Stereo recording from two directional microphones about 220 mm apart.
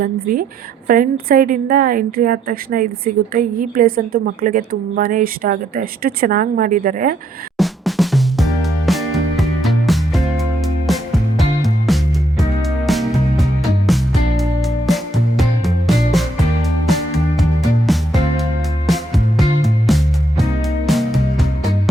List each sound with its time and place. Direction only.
0.0 s a woman's voice: 40° right (ahead or behind)
7.6 s music: centre (ahead or behind)